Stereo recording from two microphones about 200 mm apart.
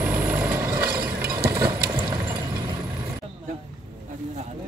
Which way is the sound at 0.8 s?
50° right (ahead or behind).